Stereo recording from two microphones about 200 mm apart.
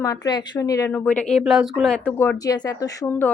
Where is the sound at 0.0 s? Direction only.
20° left (ahead or behind).